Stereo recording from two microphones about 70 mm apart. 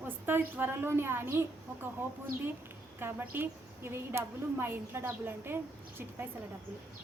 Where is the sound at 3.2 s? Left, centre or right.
Right.